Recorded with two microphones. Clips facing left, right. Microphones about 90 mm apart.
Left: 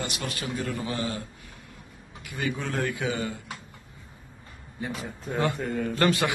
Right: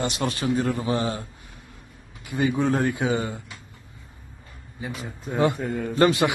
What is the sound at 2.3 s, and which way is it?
A man's voice, 20° right (ahead or behind).